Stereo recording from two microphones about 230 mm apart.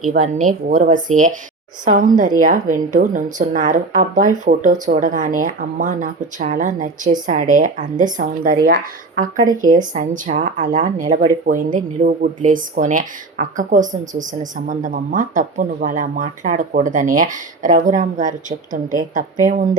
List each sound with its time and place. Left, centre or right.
0.1 s a woman's voice: right